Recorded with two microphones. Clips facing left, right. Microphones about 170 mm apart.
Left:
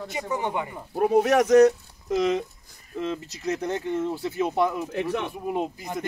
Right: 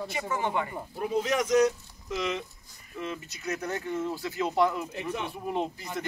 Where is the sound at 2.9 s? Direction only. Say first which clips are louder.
Left 6 dB; 30° left (ahead or behind).